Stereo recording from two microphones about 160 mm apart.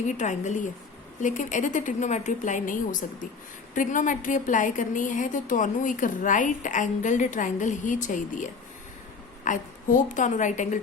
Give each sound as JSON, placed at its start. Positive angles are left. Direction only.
{"t": 0.1, "sound": "a woman's voice", "side_deg": 50}